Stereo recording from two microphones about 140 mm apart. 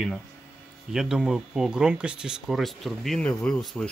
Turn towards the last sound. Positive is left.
turn(degrees=5)  # may be behind; listen again after turning